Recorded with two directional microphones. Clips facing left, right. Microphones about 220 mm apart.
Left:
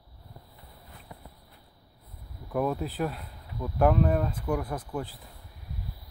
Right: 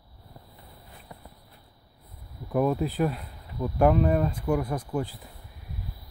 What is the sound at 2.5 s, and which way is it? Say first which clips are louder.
Speech: right 4 dB; 10° right (ahead or behind).